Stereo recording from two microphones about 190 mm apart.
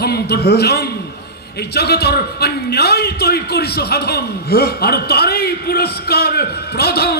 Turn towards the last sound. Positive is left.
turn(degrees=55)  # may be behind; listen again after turning